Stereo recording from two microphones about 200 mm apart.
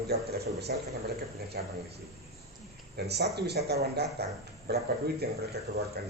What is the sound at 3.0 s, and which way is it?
Speech, 55° right (ahead or behind).